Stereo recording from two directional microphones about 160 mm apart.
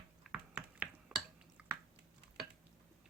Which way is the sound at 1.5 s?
10° right (ahead or behind).